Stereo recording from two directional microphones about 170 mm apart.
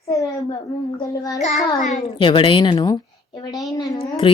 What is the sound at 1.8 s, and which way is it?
Child singing, 45° left (ahead or behind).